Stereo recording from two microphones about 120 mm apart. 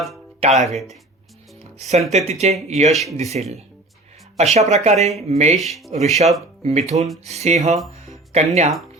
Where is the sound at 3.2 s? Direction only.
65° right (ahead or behind).